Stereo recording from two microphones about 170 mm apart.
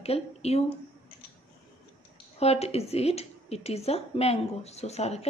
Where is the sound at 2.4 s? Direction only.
35° left (ahead or behind).